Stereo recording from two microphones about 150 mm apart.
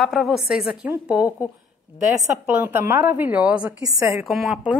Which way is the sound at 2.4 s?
10° right (ahead or behind).